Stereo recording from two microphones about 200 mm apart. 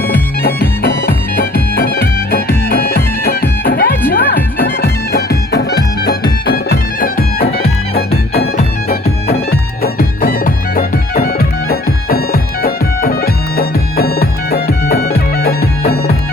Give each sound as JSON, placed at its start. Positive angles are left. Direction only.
{"t": 0.1, "sound": "music", "side_deg": 50}